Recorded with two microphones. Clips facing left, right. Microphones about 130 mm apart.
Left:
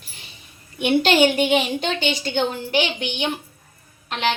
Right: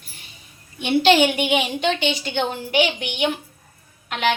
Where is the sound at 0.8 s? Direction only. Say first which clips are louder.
Right 2 dB; 55° left (ahead or behind).